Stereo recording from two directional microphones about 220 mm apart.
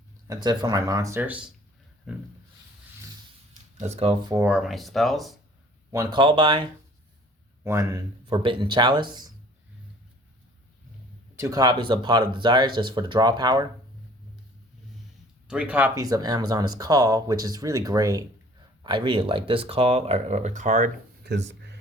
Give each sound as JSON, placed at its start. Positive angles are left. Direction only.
{"t": 0.3, "sound": "speech", "side_deg": -20}
{"t": 3.8, "sound": "speech", "side_deg": -30}
{"t": 4.3, "sound": "speech", "side_deg": -10}
{"t": 5.9, "sound": "speech", "side_deg": -20}
{"t": 11.3, "sound": "speech", "side_deg": -15}
{"t": 15.4, "sound": "speech", "side_deg": -5}
{"t": 21.3, "sound": "a sound", "side_deg": -50}